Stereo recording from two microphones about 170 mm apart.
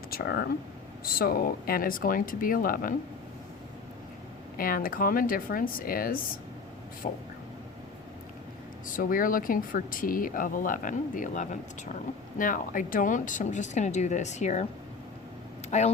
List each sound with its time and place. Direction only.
0.1 s speech: 65° left (ahead or behind)
4.5 s speech: 55° left (ahead or behind)
8.9 s speech: 55° left (ahead or behind)
15.7 s speech: 45° left (ahead or behind)